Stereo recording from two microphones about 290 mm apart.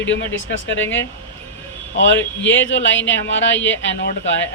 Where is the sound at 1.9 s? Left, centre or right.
Left.